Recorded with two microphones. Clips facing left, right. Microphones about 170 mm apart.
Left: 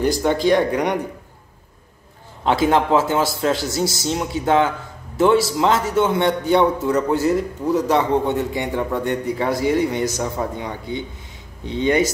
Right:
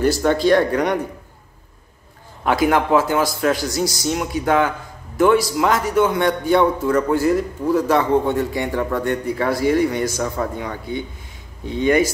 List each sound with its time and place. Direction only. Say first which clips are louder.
0.0 s speech: right 1 dB; 15° left (ahead or behind)
2.4 s a man's voice: even; 25° left (ahead or behind)